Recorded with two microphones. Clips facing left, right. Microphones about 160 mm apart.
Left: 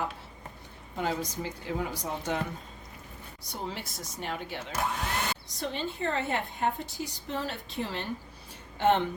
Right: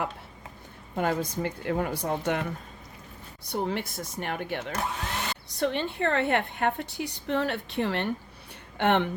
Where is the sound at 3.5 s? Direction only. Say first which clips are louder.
Right 8 dB; 60° right (ahead or behind).